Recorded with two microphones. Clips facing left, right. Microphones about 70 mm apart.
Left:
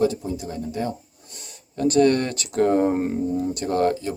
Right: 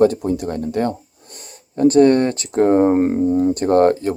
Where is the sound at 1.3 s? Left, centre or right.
Right.